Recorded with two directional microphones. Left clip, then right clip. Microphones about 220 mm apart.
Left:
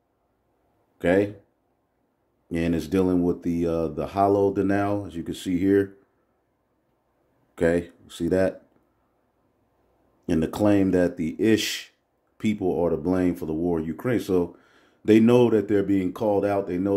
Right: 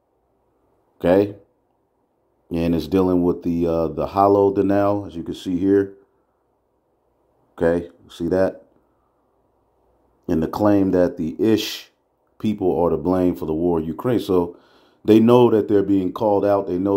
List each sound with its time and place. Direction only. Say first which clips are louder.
0.9 s speech: right 5 dB; 10° right (ahead or behind)
2.4 s speech: right 4 dB; 10° right (ahead or behind)
7.5 s speech: right 3 dB; 5° left (ahead or behind)
10.2 s speech: right 4 dB; 5° left (ahead or behind)